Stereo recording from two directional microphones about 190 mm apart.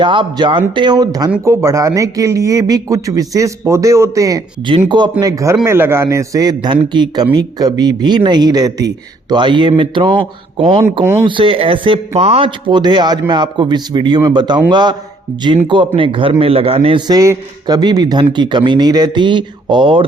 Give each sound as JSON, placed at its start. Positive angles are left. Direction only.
{"t": 0.0, "sound": "speech", "side_deg": -25}
{"t": 11.0, "sound": "speech", "side_deg": -15}
{"t": 11.3, "sound": "speech", "side_deg": -25}